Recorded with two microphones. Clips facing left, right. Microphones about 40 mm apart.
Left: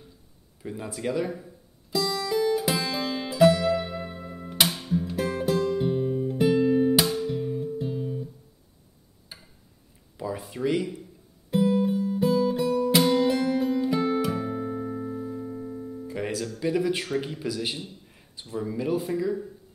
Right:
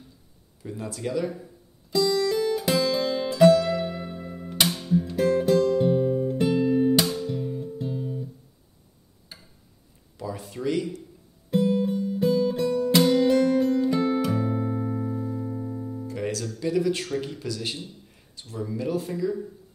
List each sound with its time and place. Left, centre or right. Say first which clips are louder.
0.6 s a man's voice: even; centre
1.9 s music: right 4 dB; centre
9.3 s a sound: even; centre
11.5 s music: even; centre
16.1 s music: left 1 dB; centre
16.5 s a man's voice: right 1 dB; centre